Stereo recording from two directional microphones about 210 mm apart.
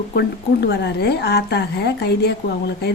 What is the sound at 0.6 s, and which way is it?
A woman's voice, 55° left (ahead or behind).